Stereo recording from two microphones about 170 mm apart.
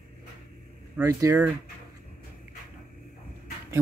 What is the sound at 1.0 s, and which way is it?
Speech, 20° right (ahead or behind).